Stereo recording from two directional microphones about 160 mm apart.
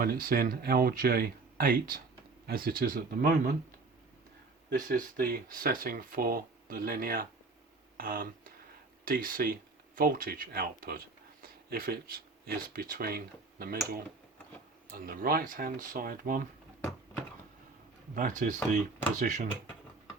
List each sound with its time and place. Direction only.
0.0 s speech: 65° right (ahead or behind)
4.9 s speech: 65° right (ahead or behind)
7.9 s a sound: 65° right (ahead or behind)
9.0 s speech: 60° right (ahead or behind)
18.1 s speech: 55° right (ahead or behind)